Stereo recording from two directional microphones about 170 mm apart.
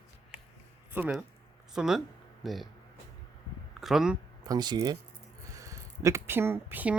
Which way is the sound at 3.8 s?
Centre (ahead or behind).